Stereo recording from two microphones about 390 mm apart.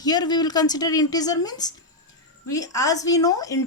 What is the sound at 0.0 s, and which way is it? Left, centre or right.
A woman's voice, centre.